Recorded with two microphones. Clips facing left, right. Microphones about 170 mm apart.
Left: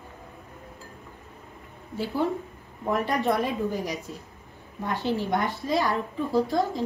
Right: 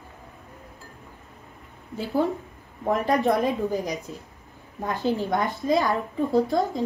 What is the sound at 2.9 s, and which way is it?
Speech, 40° right (ahead or behind).